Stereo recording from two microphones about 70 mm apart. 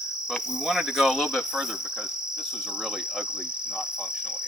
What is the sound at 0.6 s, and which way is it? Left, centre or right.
Cricket, centre.